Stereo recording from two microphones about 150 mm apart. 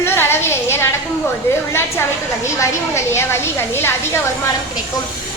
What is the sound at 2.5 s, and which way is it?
A woman's voice, 20° left (ahead or behind).